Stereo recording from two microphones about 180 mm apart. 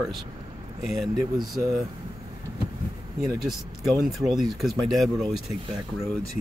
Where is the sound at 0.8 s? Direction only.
Centre (ahead or behind).